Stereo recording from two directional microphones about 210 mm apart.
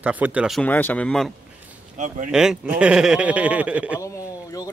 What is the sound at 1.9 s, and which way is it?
Speech, 35° right (ahead or behind).